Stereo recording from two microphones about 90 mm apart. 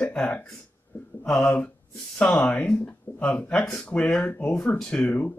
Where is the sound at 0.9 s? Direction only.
20° left (ahead or behind).